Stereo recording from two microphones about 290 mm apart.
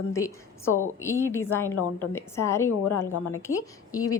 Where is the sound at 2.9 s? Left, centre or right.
Left.